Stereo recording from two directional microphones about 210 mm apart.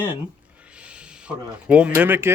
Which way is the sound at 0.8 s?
5° right (ahead or behind).